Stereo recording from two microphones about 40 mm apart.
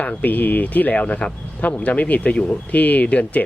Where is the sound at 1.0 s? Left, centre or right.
Left.